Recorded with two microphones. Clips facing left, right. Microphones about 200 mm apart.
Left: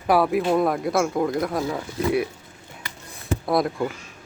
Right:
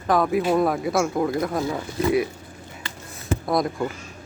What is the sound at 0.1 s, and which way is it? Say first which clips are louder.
Speech: left 1 dB; 5° left (ahead or behind).